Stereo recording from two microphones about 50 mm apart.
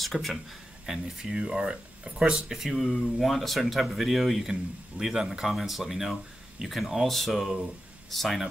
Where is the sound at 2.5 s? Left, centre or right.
Centre.